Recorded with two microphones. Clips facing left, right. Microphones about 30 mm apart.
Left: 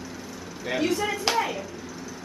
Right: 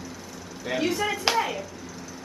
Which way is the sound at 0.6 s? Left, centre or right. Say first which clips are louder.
Even; centre.